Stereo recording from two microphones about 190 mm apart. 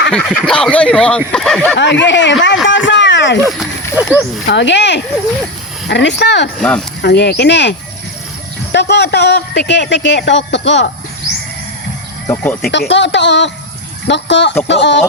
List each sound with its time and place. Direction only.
0.1 s speech: 5° left (ahead or behind)
1.8 s speech: 70° left (ahead or behind)
3.6 s speech: 10° right (ahead or behind)
4.4 s speech: 65° left (ahead or behind)
6.6 s speech: 5° left (ahead or behind)
7.0 s speech: 60° left (ahead or behind)
12.3 s speech: 10° left (ahead or behind)
12.9 s speech: 70° left (ahead or behind)